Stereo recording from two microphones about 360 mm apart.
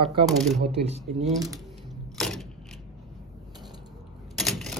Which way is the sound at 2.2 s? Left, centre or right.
Centre.